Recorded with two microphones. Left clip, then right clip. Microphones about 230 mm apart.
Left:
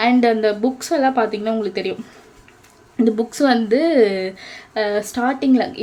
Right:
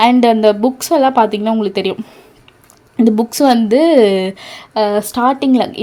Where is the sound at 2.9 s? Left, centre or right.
Right.